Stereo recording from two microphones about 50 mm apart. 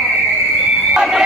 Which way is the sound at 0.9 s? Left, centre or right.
Centre.